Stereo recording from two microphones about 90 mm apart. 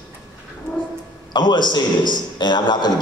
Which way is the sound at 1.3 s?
55° left (ahead or behind).